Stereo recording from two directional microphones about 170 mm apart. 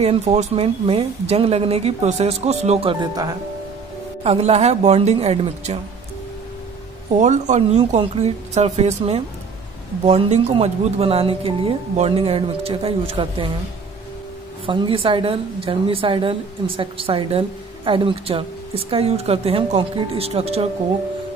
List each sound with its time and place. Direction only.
0.0 s a woman's voice: 40° right (ahead or behind)
4.2 s a woman's voice: 35° right (ahead or behind)
7.1 s a woman's voice: 45° right (ahead or behind)
14.7 s a woman's voice: 30° right (ahead or behind)